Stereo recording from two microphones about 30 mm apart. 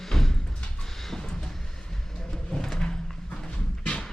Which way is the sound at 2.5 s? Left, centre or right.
Left.